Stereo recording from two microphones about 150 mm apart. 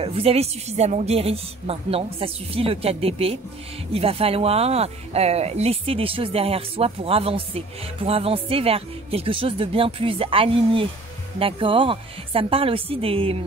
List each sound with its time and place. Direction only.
0.0 s speech: 40° right (ahead or behind)